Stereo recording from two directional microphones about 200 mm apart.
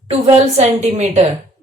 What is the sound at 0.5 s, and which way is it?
Speech, 35° right (ahead or behind).